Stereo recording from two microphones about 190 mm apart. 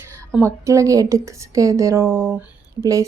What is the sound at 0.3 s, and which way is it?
Speech, 15° right (ahead or behind).